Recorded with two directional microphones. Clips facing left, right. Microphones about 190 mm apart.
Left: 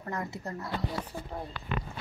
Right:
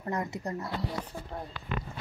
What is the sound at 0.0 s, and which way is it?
Speech, 20° right (ahead or behind).